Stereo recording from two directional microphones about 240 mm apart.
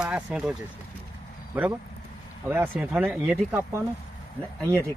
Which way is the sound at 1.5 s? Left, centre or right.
Centre.